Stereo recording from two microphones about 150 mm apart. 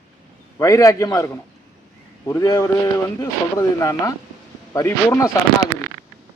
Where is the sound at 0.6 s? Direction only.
20° left (ahead or behind).